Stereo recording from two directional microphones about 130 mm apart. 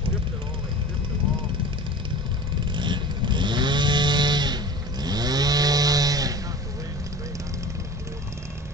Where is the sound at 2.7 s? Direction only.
35° right (ahead or behind).